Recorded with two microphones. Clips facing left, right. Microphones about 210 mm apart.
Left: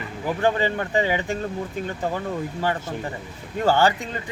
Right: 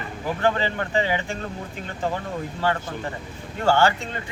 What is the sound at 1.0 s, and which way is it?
Speech, 15° left (ahead or behind).